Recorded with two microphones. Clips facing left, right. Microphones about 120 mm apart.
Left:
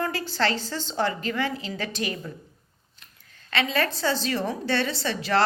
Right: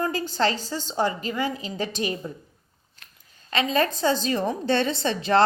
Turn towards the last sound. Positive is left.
turn(degrees=-20)  # may be behind; listen again after turning